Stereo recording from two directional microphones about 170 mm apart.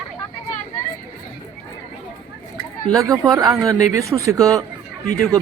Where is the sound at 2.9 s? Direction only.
20° right (ahead or behind).